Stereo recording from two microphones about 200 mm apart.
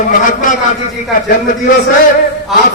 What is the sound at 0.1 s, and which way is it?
Speech, 40° left (ahead or behind).